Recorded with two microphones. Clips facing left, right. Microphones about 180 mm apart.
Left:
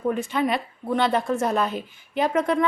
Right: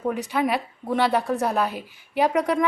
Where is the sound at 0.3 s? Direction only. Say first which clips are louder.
Even; 10° right (ahead or behind).